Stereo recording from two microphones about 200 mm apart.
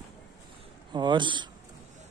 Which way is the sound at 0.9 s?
25° right (ahead or behind).